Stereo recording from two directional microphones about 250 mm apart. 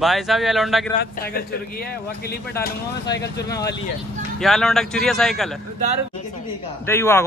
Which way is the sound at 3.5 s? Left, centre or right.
Centre.